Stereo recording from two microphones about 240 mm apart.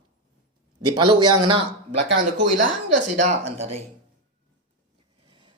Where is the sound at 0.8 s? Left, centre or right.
Centre.